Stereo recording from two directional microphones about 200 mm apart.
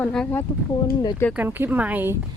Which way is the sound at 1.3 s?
10° right (ahead or behind).